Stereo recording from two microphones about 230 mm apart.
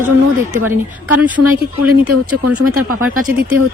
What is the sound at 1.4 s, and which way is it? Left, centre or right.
Speech, right.